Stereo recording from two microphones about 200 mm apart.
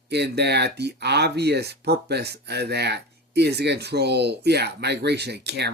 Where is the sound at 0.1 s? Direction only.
55° right (ahead or behind).